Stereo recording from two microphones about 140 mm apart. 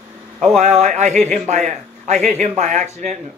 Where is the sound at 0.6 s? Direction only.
55° right (ahead or behind).